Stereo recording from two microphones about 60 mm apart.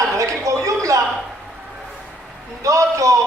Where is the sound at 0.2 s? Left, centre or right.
Right.